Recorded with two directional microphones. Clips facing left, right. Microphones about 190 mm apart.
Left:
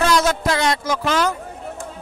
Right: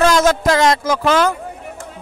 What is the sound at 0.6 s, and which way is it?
Speech, 90° right.